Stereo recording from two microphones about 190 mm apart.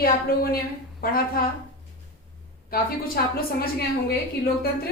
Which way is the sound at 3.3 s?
50° left (ahead or behind).